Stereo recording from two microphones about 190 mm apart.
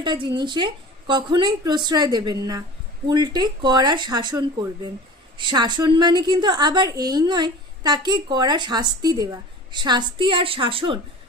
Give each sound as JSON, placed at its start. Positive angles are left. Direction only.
{"t": 0.0, "sound": "a woman's voice", "side_deg": -25}